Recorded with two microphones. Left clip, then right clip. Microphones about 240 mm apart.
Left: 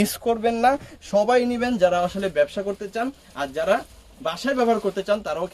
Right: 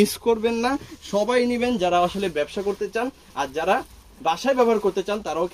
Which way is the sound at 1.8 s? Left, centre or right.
Left.